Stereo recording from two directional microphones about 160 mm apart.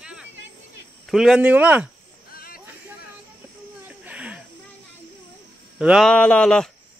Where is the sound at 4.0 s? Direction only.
5° right (ahead or behind).